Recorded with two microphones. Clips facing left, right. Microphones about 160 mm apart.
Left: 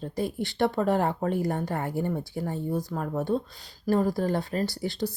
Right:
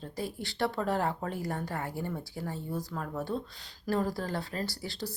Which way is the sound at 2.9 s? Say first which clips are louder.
Left 6 dB; 40° left (ahead or behind).